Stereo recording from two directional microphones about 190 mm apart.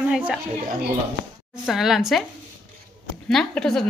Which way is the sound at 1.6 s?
Centre (ahead or behind).